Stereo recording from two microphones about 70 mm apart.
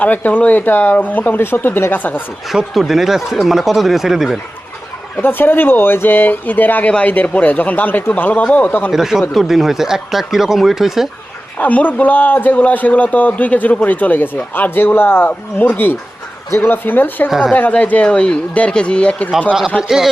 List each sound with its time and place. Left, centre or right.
0.0 s a man's voice: left
2.7 s speech: centre
5.2 s a man's voice: left
8.9 s speech: centre
11.5 s a man's voice: left
17.2 s speech: centre
17.5 s speech: centre